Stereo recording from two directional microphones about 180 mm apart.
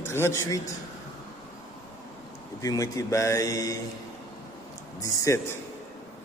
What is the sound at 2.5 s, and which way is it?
Speech, 20° left (ahead or behind).